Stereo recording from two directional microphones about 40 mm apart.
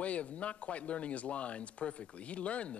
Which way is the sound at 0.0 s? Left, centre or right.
Left.